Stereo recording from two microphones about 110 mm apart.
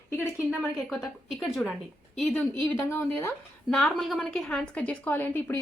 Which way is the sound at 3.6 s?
5° left (ahead or behind).